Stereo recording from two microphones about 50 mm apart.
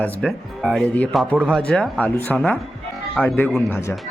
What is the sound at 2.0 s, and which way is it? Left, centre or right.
Speech, left.